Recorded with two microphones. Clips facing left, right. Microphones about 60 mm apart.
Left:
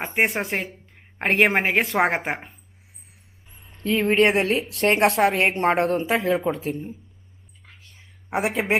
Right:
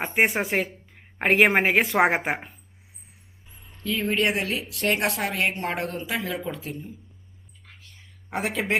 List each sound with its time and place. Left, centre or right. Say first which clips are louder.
0.0 s a woman's voice: even; centre
3.8 s a woman's voice: left 6 dB; left
8.3 s speech: left 3 dB; centre